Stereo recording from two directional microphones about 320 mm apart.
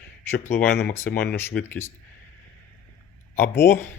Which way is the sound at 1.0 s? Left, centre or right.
Left.